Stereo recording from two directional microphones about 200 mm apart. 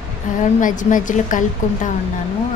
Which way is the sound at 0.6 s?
40° left (ahead or behind).